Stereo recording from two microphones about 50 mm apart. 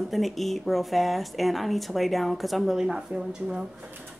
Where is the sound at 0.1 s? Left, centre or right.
Centre.